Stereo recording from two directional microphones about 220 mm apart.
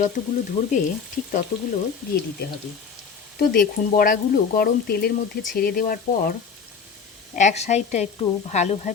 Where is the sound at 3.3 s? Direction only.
40° left (ahead or behind).